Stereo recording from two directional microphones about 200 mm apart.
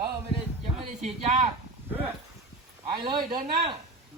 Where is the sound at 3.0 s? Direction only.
20° right (ahead or behind).